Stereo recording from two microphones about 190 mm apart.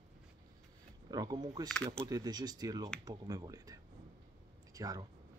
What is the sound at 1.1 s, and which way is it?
Speech, 20° right (ahead or behind).